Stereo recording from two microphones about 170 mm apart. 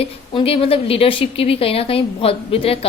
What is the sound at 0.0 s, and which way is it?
A woman's voice, 35° left (ahead or behind).